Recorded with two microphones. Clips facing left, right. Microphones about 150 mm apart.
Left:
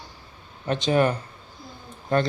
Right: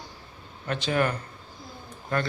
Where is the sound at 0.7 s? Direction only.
20° left (ahead or behind).